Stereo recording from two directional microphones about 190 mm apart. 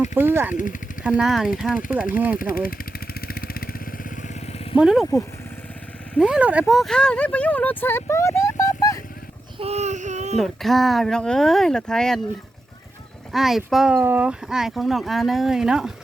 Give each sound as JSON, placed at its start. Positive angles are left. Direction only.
{"t": 0.0, "sound": "speech", "side_deg": -10}
{"t": 0.5, "sound": "speech", "side_deg": 45}
{"t": 1.0, "sound": "speech", "side_deg": -5}
{"t": 2.4, "sound": "vehicle", "side_deg": 50}
{"t": 4.8, "sound": "speech", "side_deg": -5}
{"t": 9.6, "sound": "speech", "side_deg": -35}
{"t": 10.3, "sound": "speech", "side_deg": 0}
{"t": 13.3, "sound": "speech", "side_deg": 0}